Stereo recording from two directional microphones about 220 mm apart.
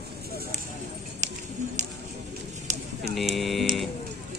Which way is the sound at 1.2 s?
35° right (ahead or behind).